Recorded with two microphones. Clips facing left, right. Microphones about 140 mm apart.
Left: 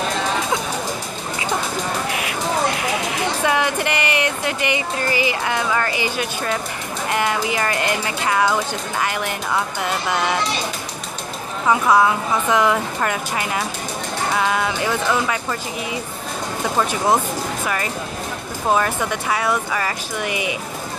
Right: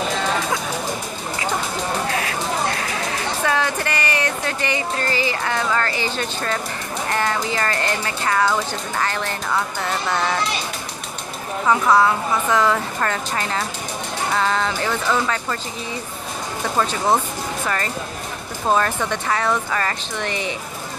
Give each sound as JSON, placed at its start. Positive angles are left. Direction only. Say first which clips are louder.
{"t": 2.0, "sound": "a sound", "louder": "even", "side_deg": 15}
{"t": 7.1, "sound": "a woman's voice", "louder": "left 2 dB", "side_deg": 15}
{"t": 11.6, "sound": "a woman's voice", "louder": "left 1 dB", "side_deg": 10}
{"t": 16.7, "sound": "a woman's voice", "louder": "left 1 dB", "side_deg": 15}
{"t": 18.7, "sound": "a woman's voice", "louder": "even", "side_deg": 10}